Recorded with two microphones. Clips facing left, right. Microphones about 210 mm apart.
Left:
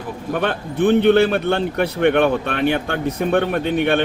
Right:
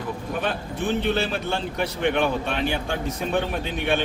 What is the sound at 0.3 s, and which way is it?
Speech, 60° left (ahead or behind).